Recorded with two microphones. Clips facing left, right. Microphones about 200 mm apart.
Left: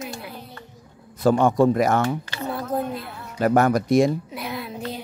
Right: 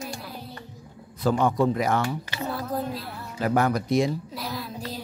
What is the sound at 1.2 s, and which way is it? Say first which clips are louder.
Speech: left 5 dB; 50° left (ahead or behind).